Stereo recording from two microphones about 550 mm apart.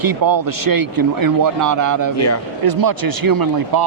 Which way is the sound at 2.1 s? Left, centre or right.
Left.